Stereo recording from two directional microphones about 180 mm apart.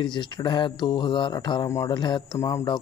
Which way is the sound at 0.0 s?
25° left (ahead or behind).